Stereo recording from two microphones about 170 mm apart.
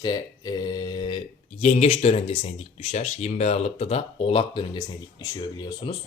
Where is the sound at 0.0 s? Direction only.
25° left (ahead or behind).